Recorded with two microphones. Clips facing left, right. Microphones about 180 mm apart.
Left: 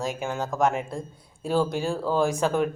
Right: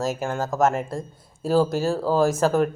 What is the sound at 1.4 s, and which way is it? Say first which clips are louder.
Speech: right 4 dB; 40° right (ahead or behind).